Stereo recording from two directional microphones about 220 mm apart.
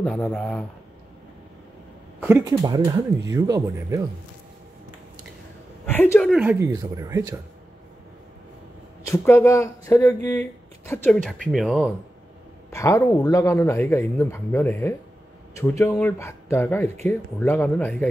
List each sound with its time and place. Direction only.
0.0 s speech: 5° left (ahead or behind)
2.2 s a woman's voice: 15° right (ahead or behind)
5.9 s a woman's voice: 5° left (ahead or behind); by 7.3 s 15° right (ahead or behind)
9.0 s a man's voice: 10° left (ahead or behind)
12.7 s a man's voice: 15° left (ahead or behind)